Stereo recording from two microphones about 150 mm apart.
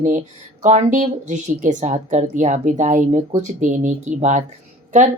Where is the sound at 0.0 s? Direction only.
55° right (ahead or behind).